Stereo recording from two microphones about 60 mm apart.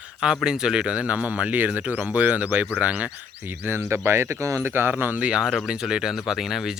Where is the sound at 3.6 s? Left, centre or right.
Right.